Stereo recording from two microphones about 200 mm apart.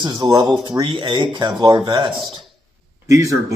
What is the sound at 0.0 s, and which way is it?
Speech, 20° right (ahead or behind).